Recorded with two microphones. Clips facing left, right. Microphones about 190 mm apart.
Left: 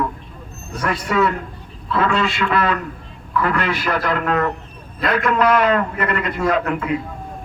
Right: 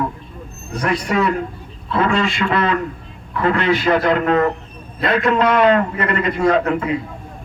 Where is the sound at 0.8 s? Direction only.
25° right (ahead or behind).